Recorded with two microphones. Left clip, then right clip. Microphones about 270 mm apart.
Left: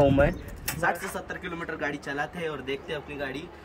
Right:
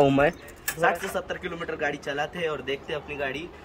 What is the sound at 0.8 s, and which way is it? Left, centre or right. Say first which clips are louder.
Speech: right 4 dB; centre.